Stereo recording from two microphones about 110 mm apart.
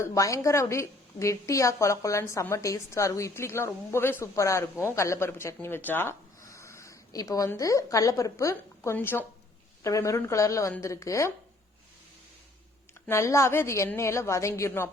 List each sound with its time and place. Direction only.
0.0 s a woman's voice: 30° left (ahead or behind)
13.1 s a woman's voice: 25° left (ahead or behind)